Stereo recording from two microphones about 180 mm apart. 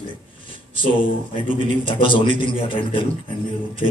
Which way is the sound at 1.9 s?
30° left (ahead or behind).